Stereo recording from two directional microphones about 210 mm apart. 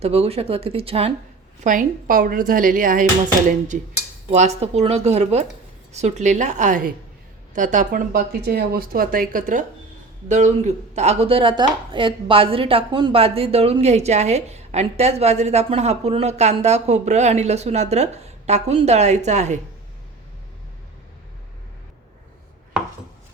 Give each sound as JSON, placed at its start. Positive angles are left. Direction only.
{"t": 0.0, "sound": "speech", "side_deg": -30}
{"t": 1.6, "sound": "speech", "side_deg": -40}